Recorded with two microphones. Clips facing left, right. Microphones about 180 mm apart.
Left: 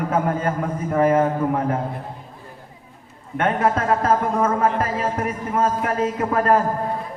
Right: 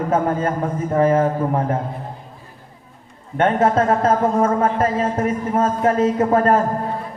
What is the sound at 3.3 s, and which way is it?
A man's voice, 30° right (ahead or behind).